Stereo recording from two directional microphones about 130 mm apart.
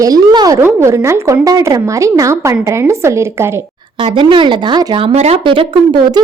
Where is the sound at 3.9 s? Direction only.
40° right (ahead or behind).